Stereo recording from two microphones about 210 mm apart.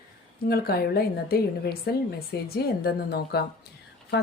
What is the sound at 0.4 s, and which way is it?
A woman's voice, 45° left (ahead or behind).